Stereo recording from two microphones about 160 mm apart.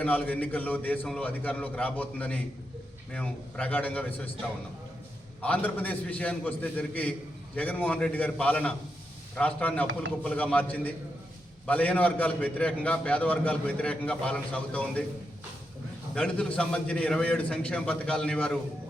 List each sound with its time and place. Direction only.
0.0 s a man's voice: 10° left (ahead or behind)
5.4 s a man's voice: 10° left (ahead or behind)
16.1 s a man's voice: 5° left (ahead or behind)